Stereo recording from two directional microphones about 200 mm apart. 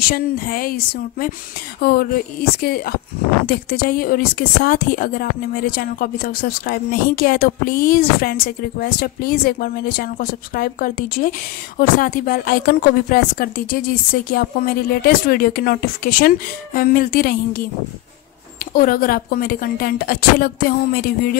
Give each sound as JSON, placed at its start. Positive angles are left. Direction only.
{"t": 0.0, "sound": "speech", "side_deg": 45}
{"t": 18.7, "sound": "speech", "side_deg": 45}